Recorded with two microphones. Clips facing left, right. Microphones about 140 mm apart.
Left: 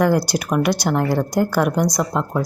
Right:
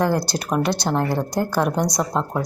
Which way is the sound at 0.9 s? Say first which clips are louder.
Left 2 dB; 15° right (ahead or behind).